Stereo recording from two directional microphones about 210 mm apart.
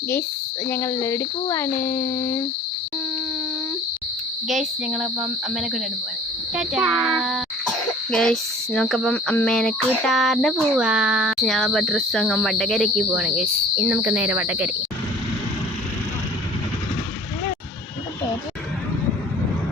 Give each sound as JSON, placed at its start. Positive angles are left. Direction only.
{"t": 0.7, "sound": "speech", "side_deg": 15}
{"t": 4.4, "sound": "a sound", "side_deg": 0}
{"t": 13.1, "sound": "speech", "side_deg": -5}